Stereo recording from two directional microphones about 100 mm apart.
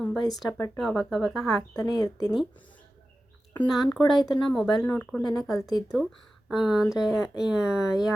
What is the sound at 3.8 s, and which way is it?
Speech, centre (ahead or behind).